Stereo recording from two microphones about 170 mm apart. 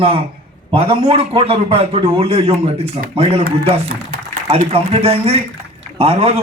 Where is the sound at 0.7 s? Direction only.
35° right (ahead or behind).